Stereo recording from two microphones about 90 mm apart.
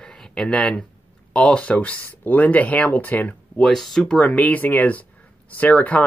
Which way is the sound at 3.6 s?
5° left (ahead or behind).